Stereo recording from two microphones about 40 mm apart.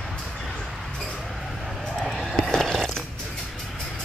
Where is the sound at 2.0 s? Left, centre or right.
Centre.